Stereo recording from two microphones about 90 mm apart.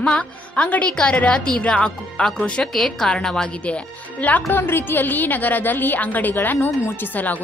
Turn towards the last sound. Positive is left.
turn(degrees=20)  # may be behind; listen again after turning